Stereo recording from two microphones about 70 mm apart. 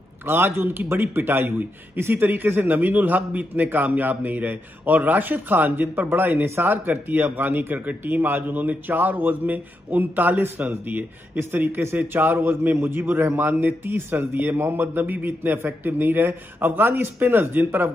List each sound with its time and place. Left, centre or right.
0.2 s a man's voice: right